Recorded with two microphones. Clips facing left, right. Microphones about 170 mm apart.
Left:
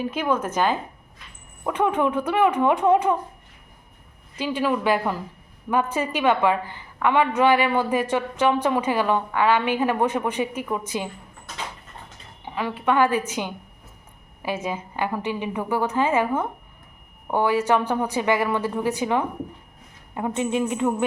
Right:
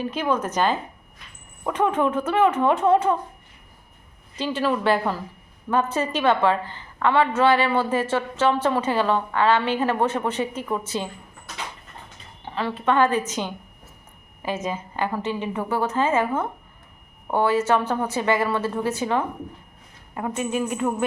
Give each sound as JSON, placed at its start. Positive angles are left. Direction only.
{"t": 0.0, "sound": "a woman's voice", "side_deg": 10}
{"t": 4.4, "sound": "a woman's voice", "side_deg": 10}
{"t": 12.5, "sound": "a woman's voice", "side_deg": 10}